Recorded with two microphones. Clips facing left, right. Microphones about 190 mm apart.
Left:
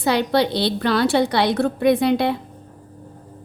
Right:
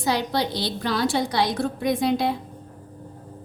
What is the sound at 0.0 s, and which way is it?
A woman's voice, 65° left (ahead or behind).